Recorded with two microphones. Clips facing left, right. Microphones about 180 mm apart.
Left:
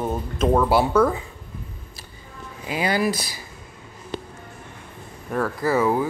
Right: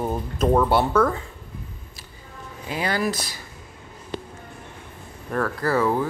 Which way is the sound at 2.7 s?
10° left (ahead or behind).